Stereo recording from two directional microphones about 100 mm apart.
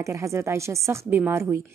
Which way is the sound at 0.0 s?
30° right (ahead or behind).